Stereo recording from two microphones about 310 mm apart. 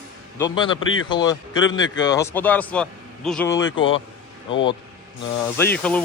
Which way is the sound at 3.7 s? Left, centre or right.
Left.